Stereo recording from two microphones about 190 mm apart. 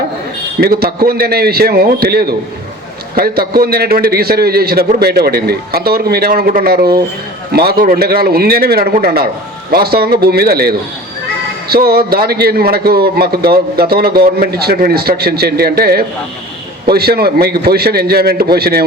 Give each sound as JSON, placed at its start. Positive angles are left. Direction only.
{"t": 0.6, "sound": "a man's voice", "side_deg": -55}